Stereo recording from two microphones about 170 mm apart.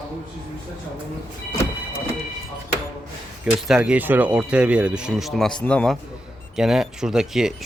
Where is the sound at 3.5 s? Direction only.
5° right (ahead or behind).